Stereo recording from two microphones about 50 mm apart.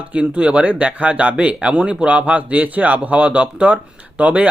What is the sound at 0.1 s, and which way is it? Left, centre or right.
Speech, right.